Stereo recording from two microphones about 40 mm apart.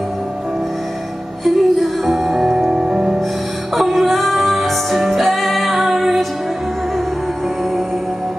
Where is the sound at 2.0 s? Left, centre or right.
Centre.